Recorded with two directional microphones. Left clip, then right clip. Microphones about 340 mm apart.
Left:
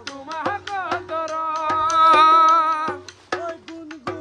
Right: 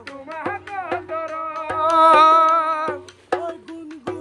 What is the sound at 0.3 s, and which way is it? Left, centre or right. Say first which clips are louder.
Music: left 3 dB; centre.